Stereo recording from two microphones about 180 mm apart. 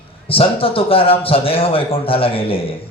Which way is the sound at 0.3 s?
30° left (ahead or behind).